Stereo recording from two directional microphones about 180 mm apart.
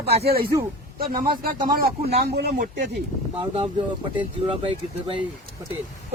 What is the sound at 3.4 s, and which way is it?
Speech, 25° right (ahead or behind).